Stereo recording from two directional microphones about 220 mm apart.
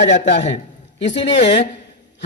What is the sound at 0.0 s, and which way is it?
Speech, 55° left (ahead or behind).